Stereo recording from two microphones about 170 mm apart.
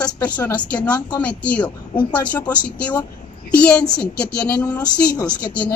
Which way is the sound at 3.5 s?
5° left (ahead or behind).